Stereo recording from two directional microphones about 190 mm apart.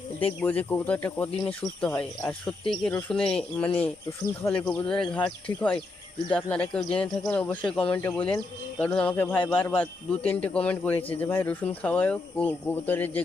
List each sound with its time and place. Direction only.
0.3 s a man's voice: 10° left (ahead or behind)